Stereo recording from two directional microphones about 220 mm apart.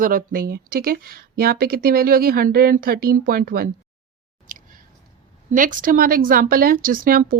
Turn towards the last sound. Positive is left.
turn(degrees=-40)  # may be behind; listen again after turning